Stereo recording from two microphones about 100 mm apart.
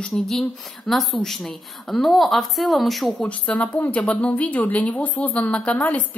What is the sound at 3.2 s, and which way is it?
Speech, 15° left (ahead or behind).